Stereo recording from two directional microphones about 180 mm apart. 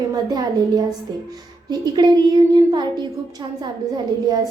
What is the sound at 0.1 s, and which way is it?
A woman's voice, 20° right (ahead or behind).